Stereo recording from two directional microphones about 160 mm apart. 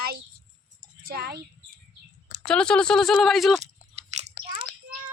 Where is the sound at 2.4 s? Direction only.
5° left (ahead or behind).